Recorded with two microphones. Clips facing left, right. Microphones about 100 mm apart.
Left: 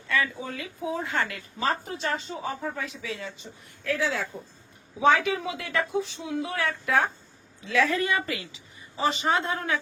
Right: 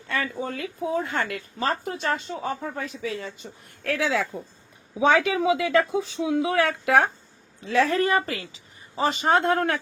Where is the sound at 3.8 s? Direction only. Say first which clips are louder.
Right 3 dB; 85° right.